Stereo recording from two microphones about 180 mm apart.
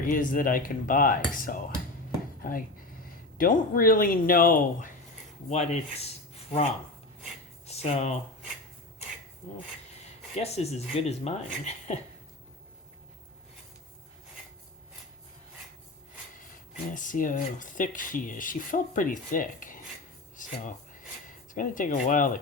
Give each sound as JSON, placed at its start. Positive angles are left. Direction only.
{"t": 0.0, "sound": "speech", "side_deg": 50}
{"t": 5.5, "sound": "speech", "side_deg": 35}
{"t": 7.7, "sound": "speech", "side_deg": 35}
{"t": 10.3, "sound": "speech", "side_deg": 35}
{"t": 16.9, "sound": "speech", "side_deg": 45}
{"t": 20.3, "sound": "a sound", "side_deg": 45}
{"t": 21.5, "sound": "speech", "side_deg": 45}